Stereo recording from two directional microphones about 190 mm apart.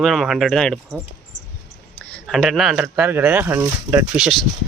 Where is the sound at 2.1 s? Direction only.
Centre (ahead or behind).